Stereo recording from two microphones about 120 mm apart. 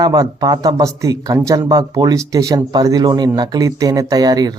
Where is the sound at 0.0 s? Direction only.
30° right (ahead or behind).